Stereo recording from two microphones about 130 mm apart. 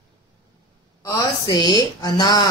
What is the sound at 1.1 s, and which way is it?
Speech, 30° left (ahead or behind).